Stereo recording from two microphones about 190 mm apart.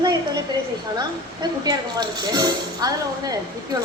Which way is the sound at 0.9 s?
20° right (ahead or behind).